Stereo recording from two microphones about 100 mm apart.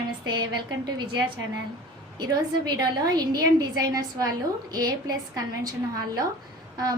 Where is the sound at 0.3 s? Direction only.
45° right (ahead or behind).